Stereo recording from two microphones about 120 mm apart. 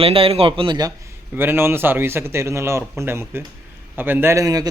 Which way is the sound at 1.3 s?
20° right (ahead or behind).